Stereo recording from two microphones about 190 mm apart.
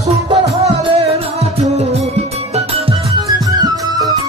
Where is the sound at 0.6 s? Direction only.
30° right (ahead or behind).